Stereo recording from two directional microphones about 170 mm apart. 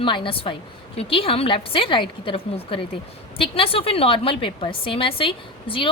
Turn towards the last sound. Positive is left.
turn(degrees=30)  # may be behind; listen again after turning